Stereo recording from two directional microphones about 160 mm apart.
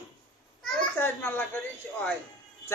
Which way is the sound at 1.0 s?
10° left (ahead or behind).